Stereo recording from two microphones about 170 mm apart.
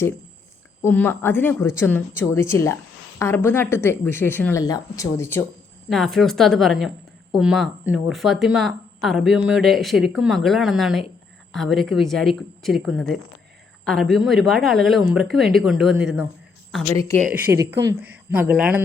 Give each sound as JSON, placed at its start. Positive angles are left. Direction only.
{"t": 0.8, "sound": "speech", "side_deg": 10}
{"t": 5.9, "sound": "speech", "side_deg": 0}
{"t": 16.9, "sound": "speech", "side_deg": 15}
{"t": 17.5, "sound": "speech", "side_deg": -15}